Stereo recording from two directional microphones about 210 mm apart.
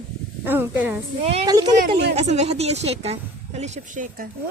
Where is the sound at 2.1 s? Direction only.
30° right (ahead or behind).